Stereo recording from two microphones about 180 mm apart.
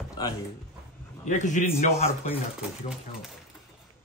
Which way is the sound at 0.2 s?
20° left (ahead or behind).